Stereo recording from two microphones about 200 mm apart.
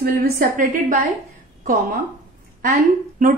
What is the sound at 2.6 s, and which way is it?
Speech, 45° right (ahead or behind).